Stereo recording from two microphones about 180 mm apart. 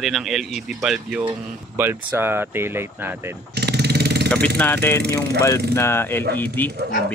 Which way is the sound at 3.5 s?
65° right (ahead or behind).